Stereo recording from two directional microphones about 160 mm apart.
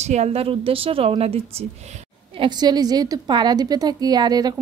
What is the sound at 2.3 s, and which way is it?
A woman's voice, 30° right (ahead or behind).